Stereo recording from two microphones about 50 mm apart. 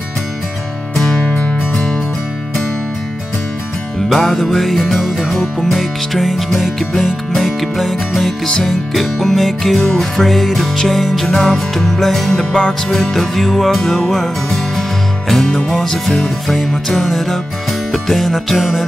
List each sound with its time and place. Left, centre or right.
0.9 s music: centre
1.4 s music: left
4.1 s music: centre
12.5 s music: centre